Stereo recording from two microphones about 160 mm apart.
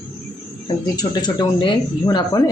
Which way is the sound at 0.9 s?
25° left (ahead or behind).